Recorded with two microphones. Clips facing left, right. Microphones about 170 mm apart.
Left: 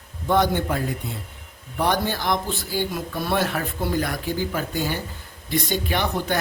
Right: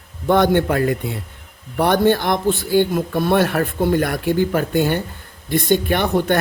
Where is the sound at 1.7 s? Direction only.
60° right (ahead or behind).